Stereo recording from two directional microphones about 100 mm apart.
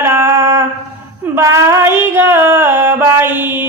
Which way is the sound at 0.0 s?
25° right (ahead or behind).